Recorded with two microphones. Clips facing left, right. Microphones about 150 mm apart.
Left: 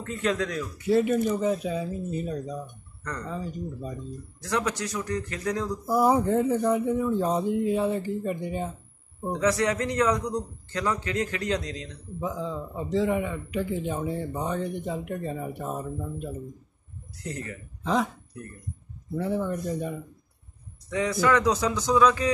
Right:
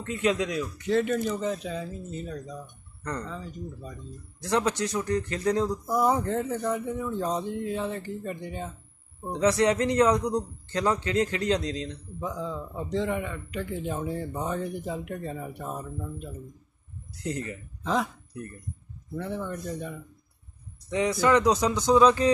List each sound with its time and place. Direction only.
0.1 s a man's voice: 10° right (ahead or behind)
0.8 s speech: 10° left (ahead or behind)
4.4 s a man's voice: 25° right (ahead or behind)
6.0 s speech: 10° left (ahead or behind)
9.4 s a man's voice: 25° right (ahead or behind)
12.2 s a man's voice: 5° left (ahead or behind)
17.2 s a man's voice: 20° right (ahead or behind)
17.8 s a man's voice: centre (ahead or behind)
19.1 s speech: 10° left (ahead or behind)
20.9 s a man's voice: 20° right (ahead or behind)